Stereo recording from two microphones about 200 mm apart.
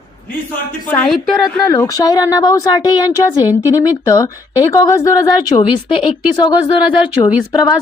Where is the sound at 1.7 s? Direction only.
15° left (ahead or behind).